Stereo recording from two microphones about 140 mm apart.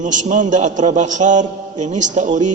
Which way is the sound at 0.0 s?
65° right (ahead or behind).